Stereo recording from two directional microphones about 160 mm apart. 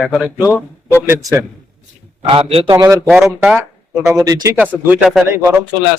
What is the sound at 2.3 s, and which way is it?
Speech, 35° right (ahead or behind).